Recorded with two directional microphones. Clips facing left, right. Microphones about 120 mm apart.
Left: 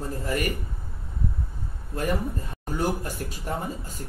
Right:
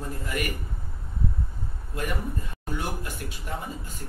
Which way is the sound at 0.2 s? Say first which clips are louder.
Left 4 dB; 40° left (ahead or behind).